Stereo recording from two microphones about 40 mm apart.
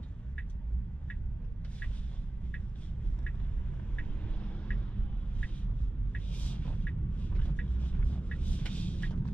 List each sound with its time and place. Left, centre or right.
3.9 s vehicle: left
6.1 s vehicle: left